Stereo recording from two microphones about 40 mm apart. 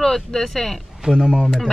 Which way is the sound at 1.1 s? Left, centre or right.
Right.